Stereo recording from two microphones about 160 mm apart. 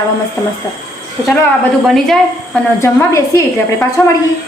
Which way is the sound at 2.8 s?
15° left (ahead or behind).